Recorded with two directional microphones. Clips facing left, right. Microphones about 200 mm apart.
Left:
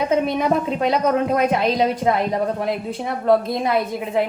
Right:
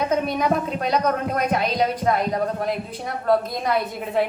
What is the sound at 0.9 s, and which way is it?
A woman's voice, 25° left (ahead or behind).